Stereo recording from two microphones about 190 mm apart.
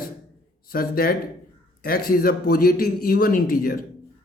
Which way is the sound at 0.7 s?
50° left (ahead or behind).